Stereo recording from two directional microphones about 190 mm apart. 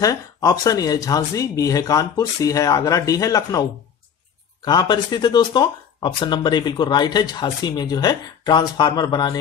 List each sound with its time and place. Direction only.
0.0 s speech: 20° left (ahead or behind)